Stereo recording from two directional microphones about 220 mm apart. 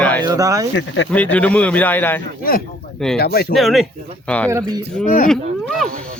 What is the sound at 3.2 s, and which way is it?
Speech, 45° left (ahead or behind).